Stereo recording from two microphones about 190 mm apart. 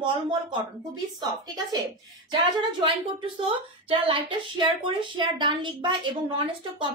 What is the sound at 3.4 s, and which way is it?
Speech, 30° right (ahead or behind).